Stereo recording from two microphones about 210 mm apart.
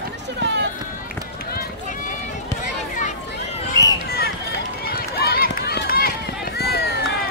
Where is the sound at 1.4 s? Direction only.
45° left (ahead or behind).